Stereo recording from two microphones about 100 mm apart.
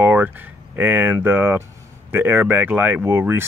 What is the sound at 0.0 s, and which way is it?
Speech, 20° right (ahead or behind).